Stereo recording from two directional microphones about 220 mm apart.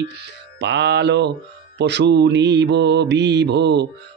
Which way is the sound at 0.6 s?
50° right (ahead or behind).